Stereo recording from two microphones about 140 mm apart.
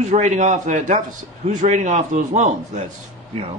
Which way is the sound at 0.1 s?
55° right (ahead or behind).